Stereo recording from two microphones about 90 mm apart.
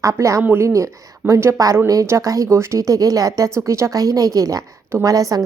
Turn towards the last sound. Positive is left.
turn(degrees=-40)  # may be behind; listen again after turning